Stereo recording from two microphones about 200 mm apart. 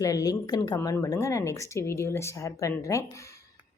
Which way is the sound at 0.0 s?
15° left (ahead or behind).